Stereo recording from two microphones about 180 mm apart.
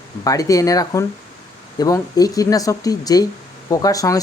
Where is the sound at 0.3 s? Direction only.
20° left (ahead or behind).